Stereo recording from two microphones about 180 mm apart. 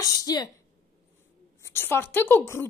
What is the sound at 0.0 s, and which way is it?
Speech, 20° left (ahead or behind).